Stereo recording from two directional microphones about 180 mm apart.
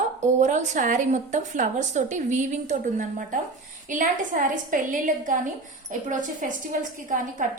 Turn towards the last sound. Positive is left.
turn(degrees=-45)  # may be behind; listen again after turning